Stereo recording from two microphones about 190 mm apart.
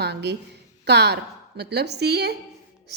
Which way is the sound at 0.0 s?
60° right (ahead or behind).